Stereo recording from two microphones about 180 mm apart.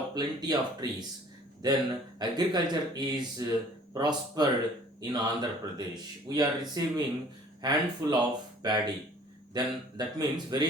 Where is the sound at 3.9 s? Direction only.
20° right (ahead or behind).